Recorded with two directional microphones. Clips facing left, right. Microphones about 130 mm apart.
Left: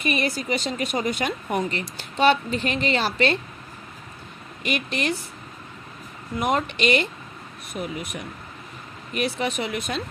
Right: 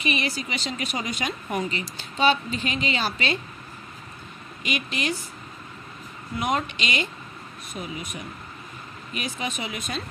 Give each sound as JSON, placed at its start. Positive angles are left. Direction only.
{"t": 0.0, "sound": "speech", "side_deg": 50}
{"t": 4.6, "sound": "speech", "side_deg": 55}
{"t": 6.4, "sound": "speech", "side_deg": 55}